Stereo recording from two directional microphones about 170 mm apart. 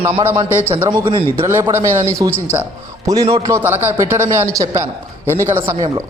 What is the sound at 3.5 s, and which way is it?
A man's voice, 15° right (ahead or behind).